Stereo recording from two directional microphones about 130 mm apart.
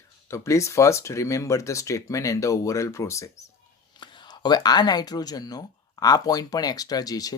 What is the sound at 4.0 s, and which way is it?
Speech, 35° left (ahead or behind).